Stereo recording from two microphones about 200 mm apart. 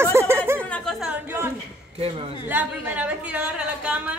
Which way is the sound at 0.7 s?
Centre (ahead or behind).